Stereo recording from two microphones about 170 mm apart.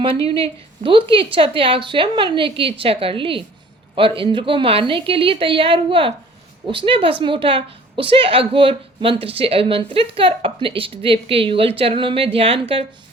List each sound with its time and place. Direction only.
0.0 s a woman's voice: 35° right (ahead or behind)